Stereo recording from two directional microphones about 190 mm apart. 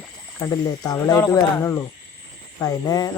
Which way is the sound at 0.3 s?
15° left (ahead or behind).